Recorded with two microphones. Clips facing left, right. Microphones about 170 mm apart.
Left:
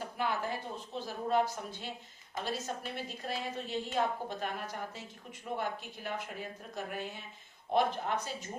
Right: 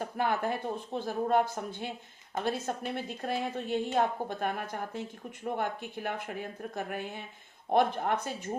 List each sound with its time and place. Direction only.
0.0 s a woman's voice: 55° right (ahead or behind)